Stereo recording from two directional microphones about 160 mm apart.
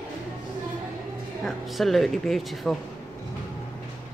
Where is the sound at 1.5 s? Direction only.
Centre (ahead or behind).